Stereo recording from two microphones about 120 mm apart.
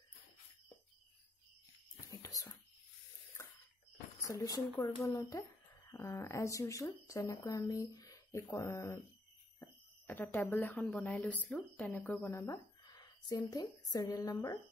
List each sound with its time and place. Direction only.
2.0 s whispering: 30° left (ahead or behind)
4.2 s speech: 25° left (ahead or behind)
12.8 s a woman's voice: 35° left (ahead or behind)